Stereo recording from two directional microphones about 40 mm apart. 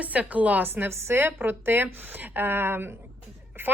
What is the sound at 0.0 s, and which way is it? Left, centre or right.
Speech, right.